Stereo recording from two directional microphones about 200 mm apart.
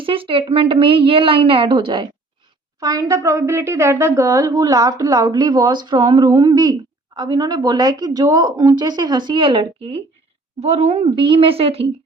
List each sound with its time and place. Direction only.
0.0 s a woman's voice: 25° right (ahead or behind)